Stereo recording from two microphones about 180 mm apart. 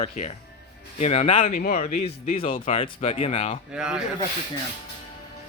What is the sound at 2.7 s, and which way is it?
Speech, 30° left (ahead or behind).